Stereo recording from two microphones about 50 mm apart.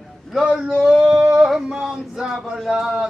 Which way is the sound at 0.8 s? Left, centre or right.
Centre.